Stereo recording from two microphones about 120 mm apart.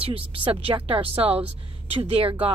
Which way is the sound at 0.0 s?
50° right (ahead or behind).